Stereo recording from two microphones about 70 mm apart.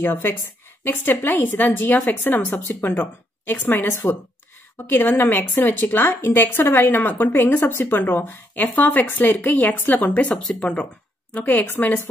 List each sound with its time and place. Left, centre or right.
0.0 s speech: left